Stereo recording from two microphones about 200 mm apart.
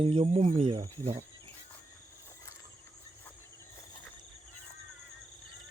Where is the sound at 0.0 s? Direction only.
30° right (ahead or behind).